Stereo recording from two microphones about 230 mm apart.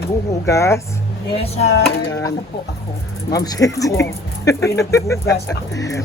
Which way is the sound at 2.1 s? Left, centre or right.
Centre.